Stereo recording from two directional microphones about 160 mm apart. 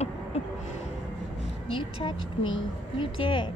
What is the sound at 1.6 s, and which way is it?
Speech, 35° left (ahead or behind).